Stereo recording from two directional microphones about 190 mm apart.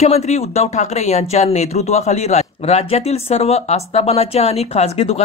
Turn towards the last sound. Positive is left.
turn(degrees=35)  # may be behind; listen again after turning